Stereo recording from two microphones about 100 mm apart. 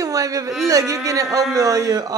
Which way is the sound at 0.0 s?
35° right (ahead or behind).